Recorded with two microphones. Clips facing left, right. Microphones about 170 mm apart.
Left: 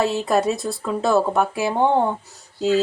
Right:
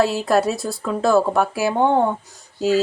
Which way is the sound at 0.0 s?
Centre (ahead or behind).